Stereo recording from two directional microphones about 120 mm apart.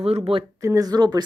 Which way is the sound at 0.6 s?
30° right (ahead or behind).